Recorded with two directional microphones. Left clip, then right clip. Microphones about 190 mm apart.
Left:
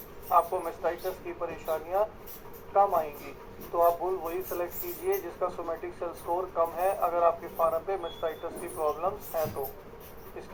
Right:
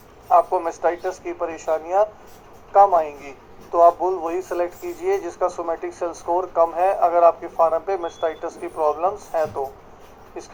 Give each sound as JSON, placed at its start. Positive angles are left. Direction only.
{"t": 0.3, "sound": "speech", "side_deg": -40}